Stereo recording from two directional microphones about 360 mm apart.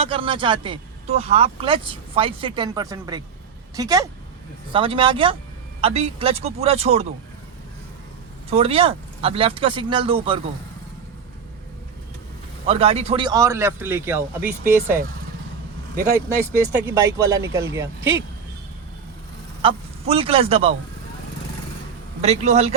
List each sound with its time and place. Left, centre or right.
0.0 s speech: centre
8.4 s speech: centre
12.6 s speech: centre
16.5 s speech: centre
19.6 s speech: centre
22.2 s speech: centre